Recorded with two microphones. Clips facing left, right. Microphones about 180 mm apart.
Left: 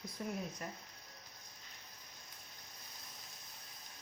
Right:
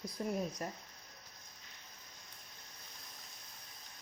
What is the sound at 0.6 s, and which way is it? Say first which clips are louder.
Speech: right 4 dB; 40° right (ahead or behind).